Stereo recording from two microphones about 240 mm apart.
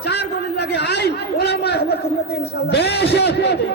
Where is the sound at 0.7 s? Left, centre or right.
Left.